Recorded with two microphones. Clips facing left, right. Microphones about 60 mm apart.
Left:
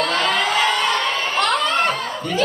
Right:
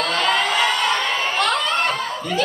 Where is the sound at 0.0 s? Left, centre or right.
Centre.